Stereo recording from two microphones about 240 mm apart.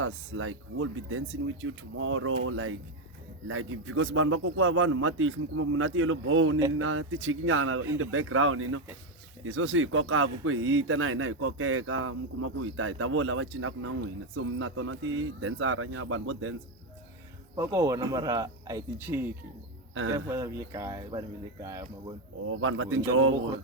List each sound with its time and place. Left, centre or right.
0.0 s speech: right
17.6 s speech: centre
22.6 s speech: right